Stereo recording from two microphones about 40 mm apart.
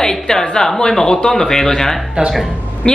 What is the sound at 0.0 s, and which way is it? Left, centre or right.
Speech, centre.